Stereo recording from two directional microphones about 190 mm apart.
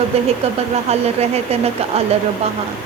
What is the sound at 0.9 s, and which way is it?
Speech, 35° right (ahead or behind).